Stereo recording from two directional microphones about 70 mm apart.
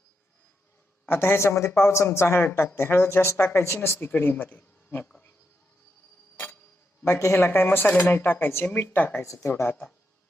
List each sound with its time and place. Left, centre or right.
1.0 s speech: left
7.2 s speech: left
9.2 s speech: left
9.5 s speech: left